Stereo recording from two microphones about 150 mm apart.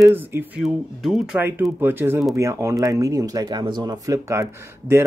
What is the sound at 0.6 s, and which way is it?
Speech, centre (ahead or behind).